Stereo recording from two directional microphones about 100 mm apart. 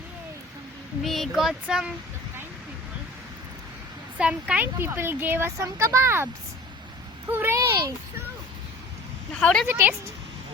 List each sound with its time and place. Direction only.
1.0 s child singing: centre (ahead or behind)
4.2 s speech: 10° right (ahead or behind); by 6.2 s 25° right (ahead or behind)
7.3 s speech: 20° right (ahead or behind)
9.4 s a woman's voice: 10° left (ahead or behind)